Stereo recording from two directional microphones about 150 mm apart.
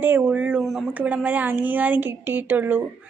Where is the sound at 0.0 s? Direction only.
15° right (ahead or behind).